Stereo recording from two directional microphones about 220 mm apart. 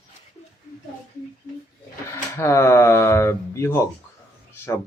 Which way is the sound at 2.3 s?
15° left (ahead or behind).